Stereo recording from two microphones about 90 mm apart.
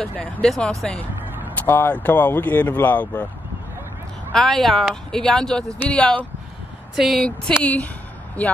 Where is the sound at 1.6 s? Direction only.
20° left (ahead or behind).